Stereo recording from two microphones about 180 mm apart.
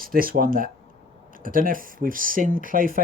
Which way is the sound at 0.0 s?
55° right (ahead or behind).